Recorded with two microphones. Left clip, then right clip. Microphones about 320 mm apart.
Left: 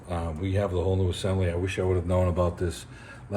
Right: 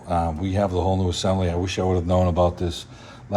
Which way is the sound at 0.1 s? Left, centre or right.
Right.